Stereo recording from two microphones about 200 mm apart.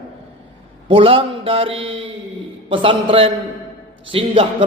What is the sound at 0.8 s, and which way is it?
A man's voice, 25° right (ahead or behind).